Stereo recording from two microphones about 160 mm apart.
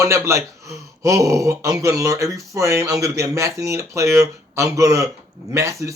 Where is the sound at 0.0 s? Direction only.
20° right (ahead or behind).